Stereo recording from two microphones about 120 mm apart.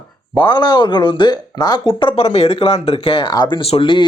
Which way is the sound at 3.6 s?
50° left (ahead or behind).